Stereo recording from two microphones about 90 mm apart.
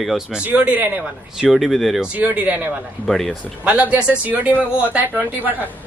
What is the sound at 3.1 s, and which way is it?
Speech, 5° left (ahead or behind).